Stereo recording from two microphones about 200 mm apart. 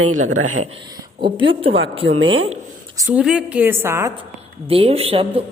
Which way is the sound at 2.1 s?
75° right (ahead or behind).